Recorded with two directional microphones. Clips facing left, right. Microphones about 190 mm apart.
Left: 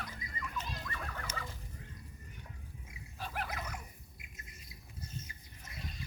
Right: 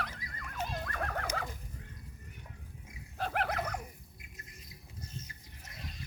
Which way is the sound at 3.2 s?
65° right (ahead or behind).